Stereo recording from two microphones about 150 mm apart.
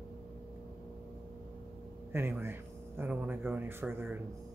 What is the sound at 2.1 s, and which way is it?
Speech, 15° right (ahead or behind).